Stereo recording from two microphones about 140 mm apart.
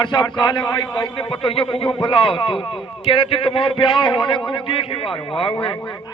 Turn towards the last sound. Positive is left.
turn(degrees=30)  # may be behind; listen again after turning